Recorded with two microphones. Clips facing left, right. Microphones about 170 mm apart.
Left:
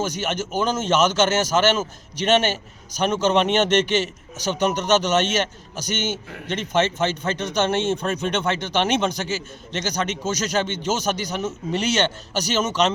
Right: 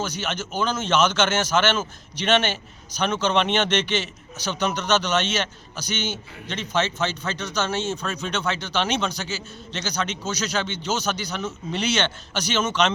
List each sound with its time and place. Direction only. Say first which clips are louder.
0.0 s speech: left 4 dB; 45° left (ahead or behind)